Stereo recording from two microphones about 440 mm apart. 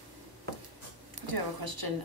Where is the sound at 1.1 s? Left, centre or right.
Right.